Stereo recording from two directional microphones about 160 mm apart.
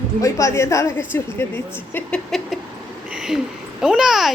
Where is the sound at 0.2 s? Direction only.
20° left (ahead or behind).